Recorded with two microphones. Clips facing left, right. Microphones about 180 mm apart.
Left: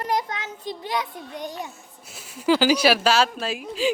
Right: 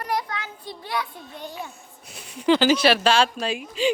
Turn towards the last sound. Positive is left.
turn(degrees=0)  # may be behind; listen again after turning